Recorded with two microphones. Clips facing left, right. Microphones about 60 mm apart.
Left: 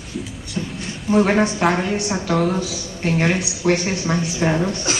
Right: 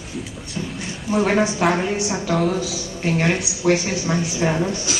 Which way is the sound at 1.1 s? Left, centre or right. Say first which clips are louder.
Left 2 dB; centre.